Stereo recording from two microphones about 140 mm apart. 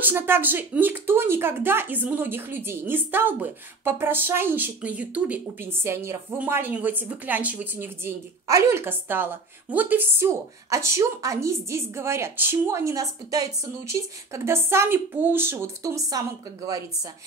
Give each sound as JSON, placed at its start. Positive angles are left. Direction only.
{"t": 0.0, "sound": "speech", "side_deg": -15}